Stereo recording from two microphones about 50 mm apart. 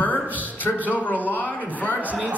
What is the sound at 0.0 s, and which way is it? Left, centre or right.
Music, left.